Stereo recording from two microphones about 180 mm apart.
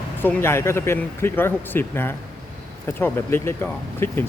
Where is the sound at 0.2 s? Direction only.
10° left (ahead or behind).